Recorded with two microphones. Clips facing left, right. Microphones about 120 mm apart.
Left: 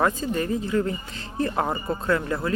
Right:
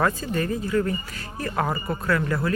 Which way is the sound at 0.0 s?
20° left (ahead or behind).